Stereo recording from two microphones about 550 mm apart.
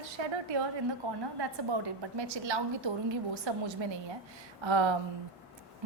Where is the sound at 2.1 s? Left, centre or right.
Right.